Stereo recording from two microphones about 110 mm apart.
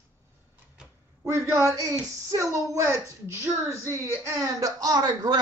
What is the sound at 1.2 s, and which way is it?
A woman's voice, 25° right (ahead or behind).